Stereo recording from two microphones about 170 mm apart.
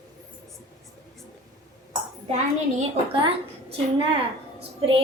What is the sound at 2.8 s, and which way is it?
A woman's voice, 35° right (ahead or behind).